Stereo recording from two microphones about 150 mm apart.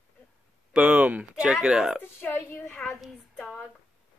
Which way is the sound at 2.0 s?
15° left (ahead or behind).